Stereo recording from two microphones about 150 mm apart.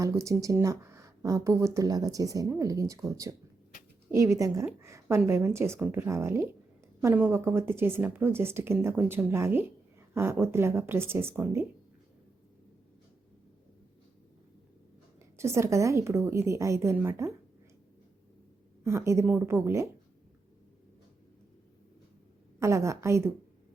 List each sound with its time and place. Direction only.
0.0 s speech: 20° right (ahead or behind)
15.4 s speech: 20° right (ahead or behind)
18.8 s speech: 20° right (ahead or behind)
22.6 s speech: 20° right (ahead or behind)